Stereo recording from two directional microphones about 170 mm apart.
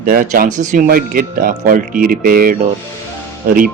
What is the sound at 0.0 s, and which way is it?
Speech, 55° right (ahead or behind).